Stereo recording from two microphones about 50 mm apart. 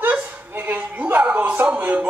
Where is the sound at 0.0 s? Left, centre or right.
Right.